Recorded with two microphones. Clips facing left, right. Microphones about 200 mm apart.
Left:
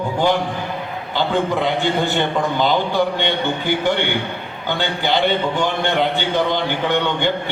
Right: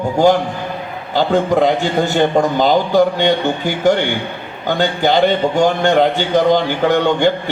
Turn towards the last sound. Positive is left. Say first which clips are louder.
# right 6 dB
turn(degrees=-45)  # may be behind; listen again after turning